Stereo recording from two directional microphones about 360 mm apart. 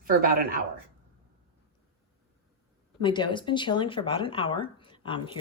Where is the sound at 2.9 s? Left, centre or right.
Centre.